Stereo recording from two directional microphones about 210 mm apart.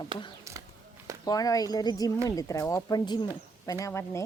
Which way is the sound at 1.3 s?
15° left (ahead or behind).